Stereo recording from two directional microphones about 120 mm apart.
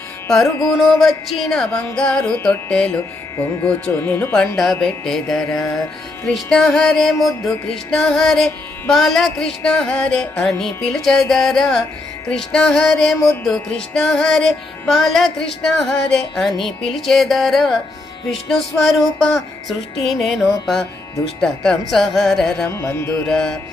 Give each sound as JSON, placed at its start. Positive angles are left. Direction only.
{"t": 0.7, "sound": "music", "side_deg": 5}
{"t": 22.6, "sound": "carnatic music", "side_deg": 20}
{"t": 23.2, "sound": "music", "side_deg": 5}